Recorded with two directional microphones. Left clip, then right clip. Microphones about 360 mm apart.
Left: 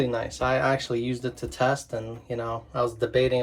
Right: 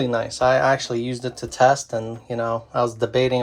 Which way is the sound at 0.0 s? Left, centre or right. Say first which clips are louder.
Right 6 dB; centre.